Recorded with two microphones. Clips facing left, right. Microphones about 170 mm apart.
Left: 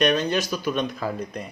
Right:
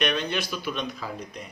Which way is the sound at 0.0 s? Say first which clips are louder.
Left 6 dB; 40° left (ahead or behind).